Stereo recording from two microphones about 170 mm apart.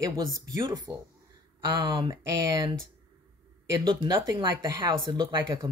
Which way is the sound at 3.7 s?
30° right (ahead or behind).